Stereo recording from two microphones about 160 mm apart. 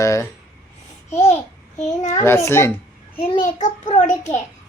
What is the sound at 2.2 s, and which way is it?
Speech, 15° left (ahead or behind).